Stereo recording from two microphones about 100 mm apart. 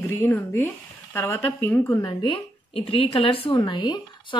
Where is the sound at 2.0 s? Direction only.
60° left (ahead or behind).